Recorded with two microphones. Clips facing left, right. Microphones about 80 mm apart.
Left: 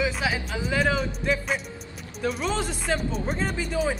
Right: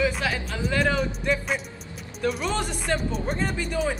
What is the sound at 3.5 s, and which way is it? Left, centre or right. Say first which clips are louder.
Speech: even; centre.